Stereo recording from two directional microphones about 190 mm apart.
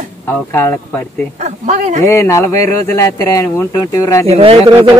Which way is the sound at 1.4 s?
40° right (ahead or behind).